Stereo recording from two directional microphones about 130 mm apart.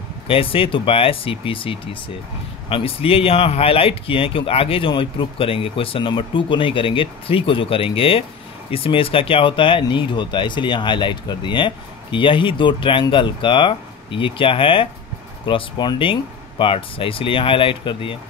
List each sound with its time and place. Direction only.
0.3 s speech: 45° left (ahead or behind)